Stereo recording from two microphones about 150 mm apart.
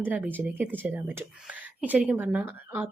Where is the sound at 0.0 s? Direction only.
10° right (ahead or behind).